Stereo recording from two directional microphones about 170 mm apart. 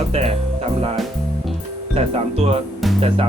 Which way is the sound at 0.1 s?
35° right (ahead or behind).